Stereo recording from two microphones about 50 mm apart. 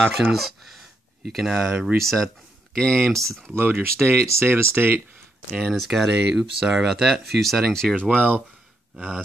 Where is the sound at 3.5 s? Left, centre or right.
Right.